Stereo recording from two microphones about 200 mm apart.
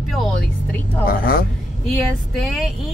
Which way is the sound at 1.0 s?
45° left (ahead or behind).